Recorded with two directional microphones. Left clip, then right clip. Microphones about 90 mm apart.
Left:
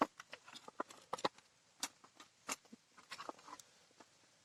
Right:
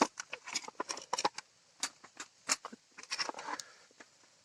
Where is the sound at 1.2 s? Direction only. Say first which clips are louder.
Right 6 dB; 25° right (ahead or behind).